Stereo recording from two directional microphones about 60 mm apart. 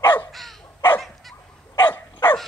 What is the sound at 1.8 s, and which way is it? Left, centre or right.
Dog, left.